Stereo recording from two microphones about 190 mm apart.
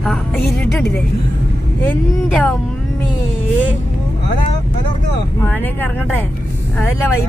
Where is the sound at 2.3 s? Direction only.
5° left (ahead or behind).